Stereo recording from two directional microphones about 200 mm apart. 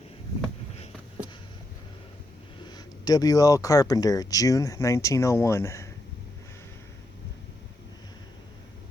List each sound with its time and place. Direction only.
2.6 s speech: 20° left (ahead or behind)